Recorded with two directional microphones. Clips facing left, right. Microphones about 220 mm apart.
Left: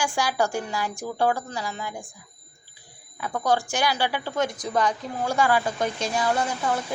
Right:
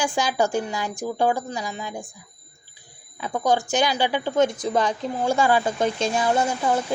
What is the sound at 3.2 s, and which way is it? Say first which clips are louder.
A woman's voice: right 2 dB; 20° right (ahead or behind).